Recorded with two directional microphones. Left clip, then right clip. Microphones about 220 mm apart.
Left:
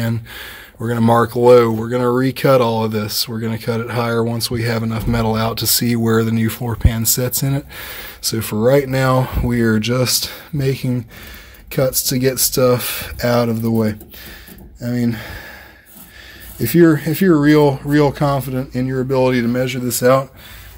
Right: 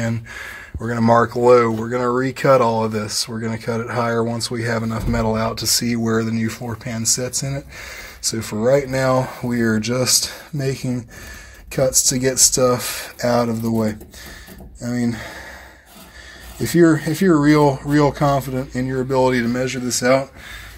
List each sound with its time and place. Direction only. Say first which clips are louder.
0.0 s speech: left 1 dB; 35° left (ahead or behind)
16.5 s speech: left 2 dB; 20° left (ahead or behind)
20.0 s speech: left 3 dB; 40° left (ahead or behind)